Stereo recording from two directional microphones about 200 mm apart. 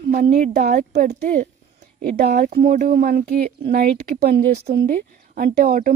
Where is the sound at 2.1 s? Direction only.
50° right (ahead or behind).